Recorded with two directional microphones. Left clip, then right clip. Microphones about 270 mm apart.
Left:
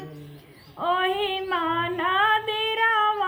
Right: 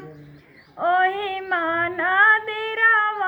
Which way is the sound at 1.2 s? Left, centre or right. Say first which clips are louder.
Right 2 dB; left.